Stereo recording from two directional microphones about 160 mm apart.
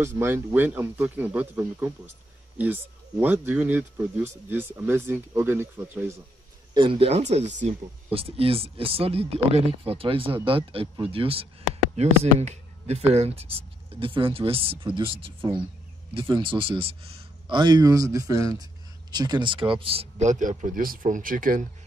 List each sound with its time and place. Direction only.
0.2 s speech: 15° right (ahead or behind)
6.7 s speech: 30° right (ahead or behind); by 21.6 s 55° right (ahead or behind)